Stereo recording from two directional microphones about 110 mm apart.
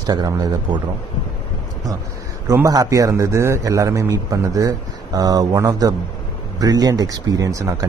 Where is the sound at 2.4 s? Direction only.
30° right (ahead or behind).